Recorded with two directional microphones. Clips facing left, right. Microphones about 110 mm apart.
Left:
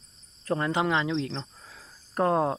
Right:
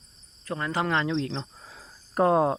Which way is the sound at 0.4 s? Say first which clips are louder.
Left 4 dB; 30° left (ahead or behind).